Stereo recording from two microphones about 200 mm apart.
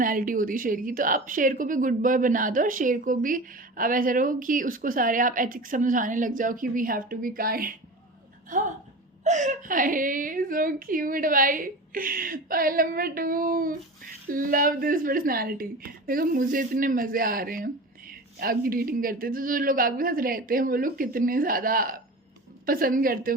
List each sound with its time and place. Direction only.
0.0 s a woman's voice: 45° right (ahead or behind)